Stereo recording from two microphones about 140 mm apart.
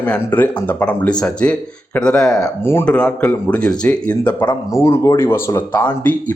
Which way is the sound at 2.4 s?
15° left (ahead or behind).